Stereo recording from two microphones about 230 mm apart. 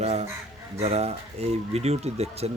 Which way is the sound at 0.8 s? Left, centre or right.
Right.